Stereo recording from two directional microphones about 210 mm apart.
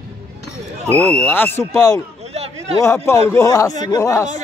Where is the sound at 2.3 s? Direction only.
30° right (ahead or behind).